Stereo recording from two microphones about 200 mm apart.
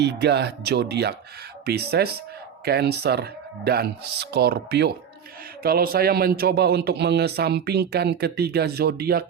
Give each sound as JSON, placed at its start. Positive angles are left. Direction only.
{"t": 0.0, "sound": "a man's voice", "side_deg": -55}